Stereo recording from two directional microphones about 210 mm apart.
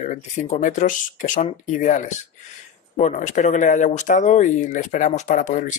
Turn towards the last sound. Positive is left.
turn(degrees=35)  # may be behind; listen again after turning